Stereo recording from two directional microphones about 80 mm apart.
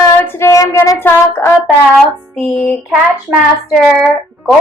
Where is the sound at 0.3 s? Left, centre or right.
Left.